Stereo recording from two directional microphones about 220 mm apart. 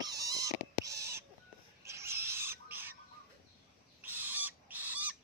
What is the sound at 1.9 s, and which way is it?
Owl, 10° right (ahead or behind).